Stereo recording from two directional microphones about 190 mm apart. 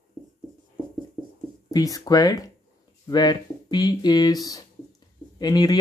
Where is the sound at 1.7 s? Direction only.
20° left (ahead or behind).